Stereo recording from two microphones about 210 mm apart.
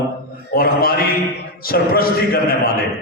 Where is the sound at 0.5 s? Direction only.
45° left (ahead or behind).